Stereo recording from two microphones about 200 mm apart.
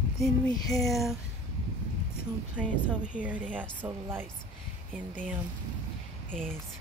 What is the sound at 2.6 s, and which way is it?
Speech, 5° right (ahead or behind).